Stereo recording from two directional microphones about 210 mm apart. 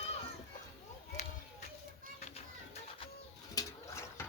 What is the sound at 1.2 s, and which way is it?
Run, 35° left (ahead or behind).